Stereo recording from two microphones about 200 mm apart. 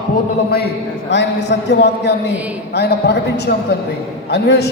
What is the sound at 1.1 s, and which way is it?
A man's voice, 60° left (ahead or behind).